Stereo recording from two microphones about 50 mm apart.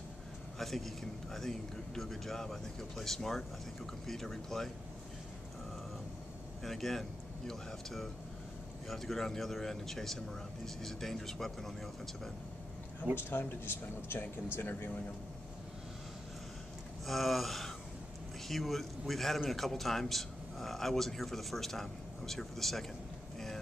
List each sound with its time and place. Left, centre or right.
0.6 s a man's voice: centre
6.6 s a man's voice: centre
13.2 s speech: left
17.0 s a man's voice: centre